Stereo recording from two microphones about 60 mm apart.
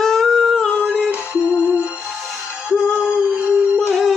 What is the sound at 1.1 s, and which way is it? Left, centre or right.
Music, centre.